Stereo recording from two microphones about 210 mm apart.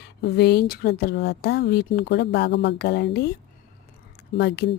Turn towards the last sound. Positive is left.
turn(degrees=55)  # may be behind; listen again after turning